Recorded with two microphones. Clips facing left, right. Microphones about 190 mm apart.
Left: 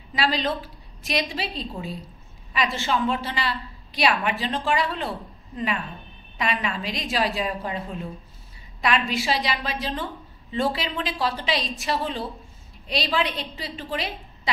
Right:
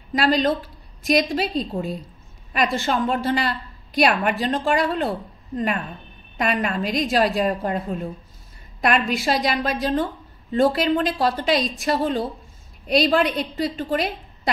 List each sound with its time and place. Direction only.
0.1 s a woman's voice: 45° right (ahead or behind)